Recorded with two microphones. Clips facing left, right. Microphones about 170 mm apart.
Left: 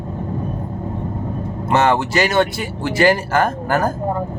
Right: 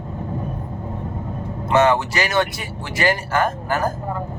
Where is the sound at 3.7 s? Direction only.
50° left (ahead or behind).